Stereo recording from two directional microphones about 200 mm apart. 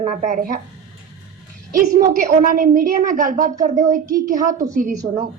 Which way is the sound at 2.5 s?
45° right (ahead or behind).